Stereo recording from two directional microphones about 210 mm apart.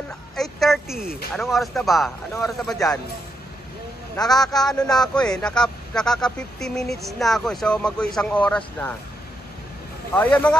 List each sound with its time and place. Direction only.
0.4 s speech: centre (ahead or behind)
4.2 s a man's voice: 20° left (ahead or behind)
4.6 s speech: centre (ahead or behind)
10.1 s speech: 5° left (ahead or behind)